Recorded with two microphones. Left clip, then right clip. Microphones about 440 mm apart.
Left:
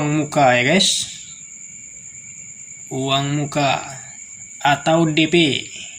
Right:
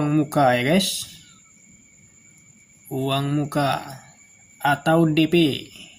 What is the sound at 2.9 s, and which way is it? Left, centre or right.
Speech, right.